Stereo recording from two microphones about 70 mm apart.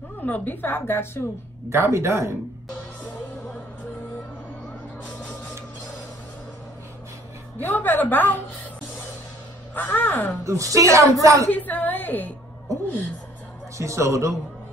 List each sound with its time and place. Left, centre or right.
0.2 s a woman's voice: left
1.7 s speech: right
7.6 s a woman's voice: left
9.8 s a woman's voice: left
10.4 s a woman's voice: right
11.5 s a woman's voice: left
13.7 s a woman's voice: right